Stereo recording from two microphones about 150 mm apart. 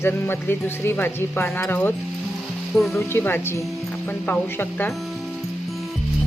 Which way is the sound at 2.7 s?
Centre (ahead or behind).